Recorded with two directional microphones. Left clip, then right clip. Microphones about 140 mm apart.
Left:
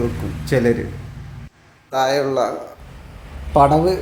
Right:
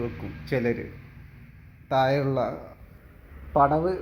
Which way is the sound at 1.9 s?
5° right (ahead or behind).